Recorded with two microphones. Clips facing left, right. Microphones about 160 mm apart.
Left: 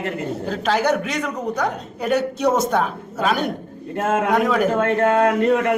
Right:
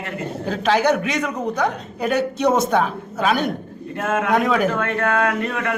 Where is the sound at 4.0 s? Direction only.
30° left (ahead or behind).